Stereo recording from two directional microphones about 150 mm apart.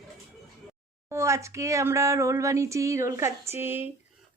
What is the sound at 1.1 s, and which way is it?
Speech, 20° right (ahead or behind).